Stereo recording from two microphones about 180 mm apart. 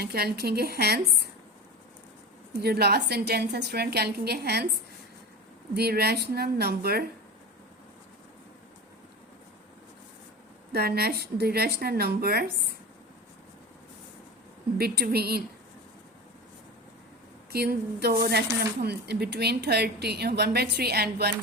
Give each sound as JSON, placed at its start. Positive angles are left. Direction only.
{"t": 0.0, "sound": "speech", "side_deg": -60}
{"t": 2.5, "sound": "speech", "side_deg": -60}
{"t": 5.7, "sound": "speech", "side_deg": -60}
{"t": 10.7, "sound": "speech", "side_deg": -60}
{"t": 14.8, "sound": "speech", "side_deg": -60}
{"t": 17.5, "sound": "speech", "side_deg": -60}